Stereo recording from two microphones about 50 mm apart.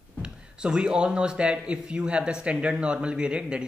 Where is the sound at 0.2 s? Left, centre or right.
Centre.